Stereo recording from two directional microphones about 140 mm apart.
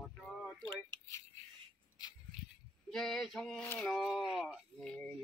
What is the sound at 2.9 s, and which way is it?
Male singing, 5° left (ahead or behind).